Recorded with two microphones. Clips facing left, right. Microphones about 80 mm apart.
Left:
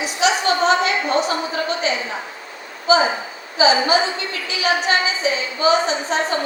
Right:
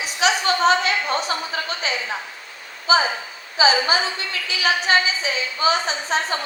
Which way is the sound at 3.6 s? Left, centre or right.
Left.